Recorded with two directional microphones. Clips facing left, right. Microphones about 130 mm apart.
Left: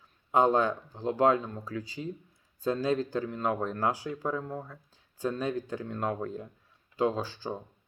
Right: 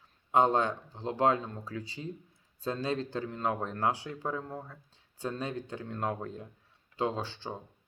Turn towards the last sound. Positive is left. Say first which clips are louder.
# left 4 dB
turn(degrees=-25)  # may be behind; listen again after turning